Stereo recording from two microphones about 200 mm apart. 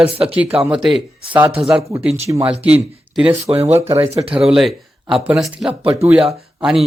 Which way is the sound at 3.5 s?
30° right (ahead or behind).